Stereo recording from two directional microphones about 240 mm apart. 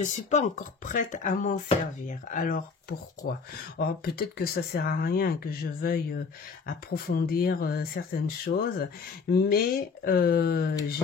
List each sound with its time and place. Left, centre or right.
0.0 s speech: left